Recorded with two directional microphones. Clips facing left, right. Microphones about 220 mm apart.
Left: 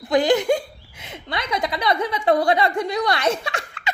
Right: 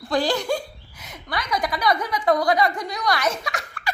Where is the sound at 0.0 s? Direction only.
20° left (ahead or behind).